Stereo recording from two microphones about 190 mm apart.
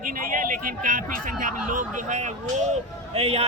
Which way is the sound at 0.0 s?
45° right (ahead or behind).